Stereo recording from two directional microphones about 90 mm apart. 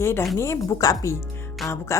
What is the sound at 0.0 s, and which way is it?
A woman's voice, 30° left (ahead or behind).